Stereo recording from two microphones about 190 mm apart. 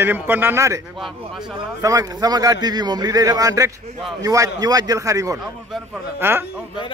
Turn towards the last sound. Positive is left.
turn(degrees=-10)  # may be behind; listen again after turning